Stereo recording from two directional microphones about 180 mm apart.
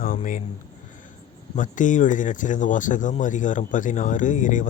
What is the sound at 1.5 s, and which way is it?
Speech, 45° left (ahead or behind).